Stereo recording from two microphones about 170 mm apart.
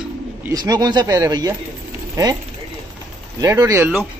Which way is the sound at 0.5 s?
20° right (ahead or behind).